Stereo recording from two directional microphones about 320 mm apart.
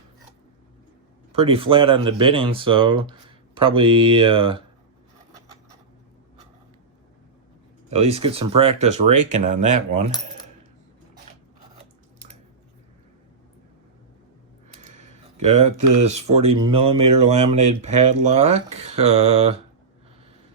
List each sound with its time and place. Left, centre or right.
1.3 s speech: centre
7.9 s speech: centre
14.8 s a sound: right
16.0 s speech: centre